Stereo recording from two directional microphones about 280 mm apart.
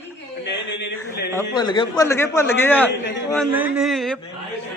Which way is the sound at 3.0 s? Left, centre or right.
Left.